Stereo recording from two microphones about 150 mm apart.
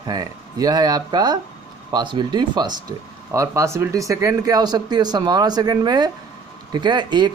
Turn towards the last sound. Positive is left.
turn(degrees=-30)  # may be behind; listen again after turning